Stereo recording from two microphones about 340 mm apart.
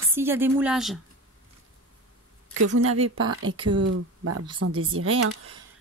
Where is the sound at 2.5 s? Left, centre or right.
Right.